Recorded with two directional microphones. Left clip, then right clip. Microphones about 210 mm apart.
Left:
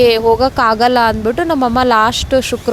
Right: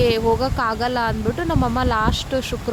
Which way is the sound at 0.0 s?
35° left (ahead or behind).